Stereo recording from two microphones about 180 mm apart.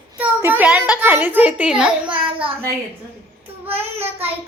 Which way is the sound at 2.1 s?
30° right (ahead or behind).